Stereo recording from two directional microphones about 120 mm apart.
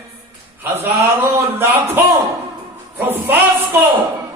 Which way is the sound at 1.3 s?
20° right (ahead or behind).